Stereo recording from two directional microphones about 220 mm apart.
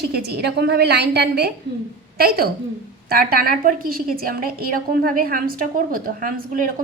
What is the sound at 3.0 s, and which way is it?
A woman's voice, 45° right (ahead or behind).